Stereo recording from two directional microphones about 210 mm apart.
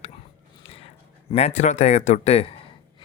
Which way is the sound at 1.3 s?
30° left (ahead or behind).